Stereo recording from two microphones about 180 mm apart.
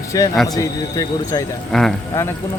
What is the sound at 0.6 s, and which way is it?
Speech, 20° left (ahead or behind).